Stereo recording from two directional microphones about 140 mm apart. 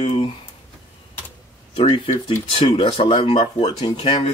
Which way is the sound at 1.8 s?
45° left (ahead or behind).